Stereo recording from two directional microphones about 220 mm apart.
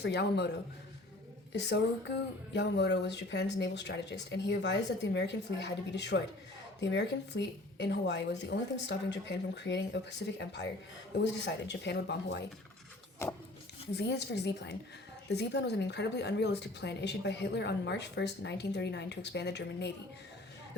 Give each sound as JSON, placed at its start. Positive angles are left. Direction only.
{"t": 0.0, "sound": "speech", "side_deg": 50}
{"t": 13.2, "sound": "speech", "side_deg": 10}
{"t": 13.9, "sound": "speech", "side_deg": 50}